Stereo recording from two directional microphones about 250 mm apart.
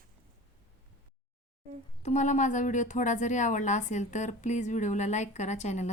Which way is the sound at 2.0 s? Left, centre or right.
Left.